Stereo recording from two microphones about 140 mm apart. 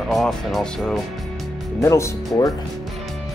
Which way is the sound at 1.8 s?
20° left (ahead or behind).